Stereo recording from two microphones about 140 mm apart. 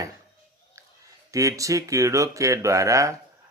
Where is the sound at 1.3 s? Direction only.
25° right (ahead or behind).